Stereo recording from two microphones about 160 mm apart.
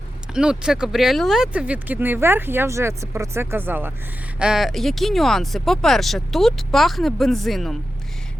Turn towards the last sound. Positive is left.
turn(degrees=0)  # may be behind; listen again after turning